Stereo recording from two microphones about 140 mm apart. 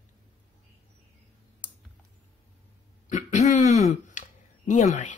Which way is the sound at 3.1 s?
60° left (ahead or behind).